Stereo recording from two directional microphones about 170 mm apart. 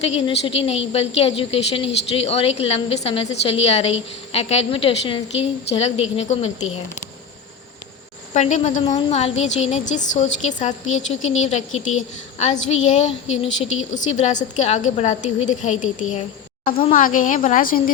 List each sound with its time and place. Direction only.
0.0 s a woman's voice: 35° left (ahead or behind)
8.3 s a woman's voice: 45° left (ahead or behind)
12.6 s a woman's voice: 45° left (ahead or behind)